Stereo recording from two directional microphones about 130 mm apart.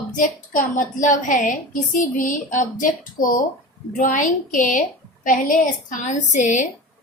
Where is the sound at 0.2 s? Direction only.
85° left.